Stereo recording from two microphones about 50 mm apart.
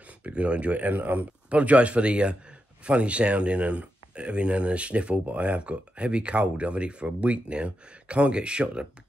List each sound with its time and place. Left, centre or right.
0.2 s speech: right